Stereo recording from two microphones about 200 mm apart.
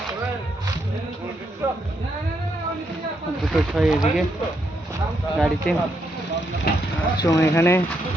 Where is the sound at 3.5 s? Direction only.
Centre (ahead or behind).